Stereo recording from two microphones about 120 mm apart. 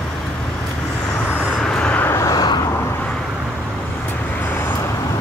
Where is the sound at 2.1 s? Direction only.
25° left (ahead or behind).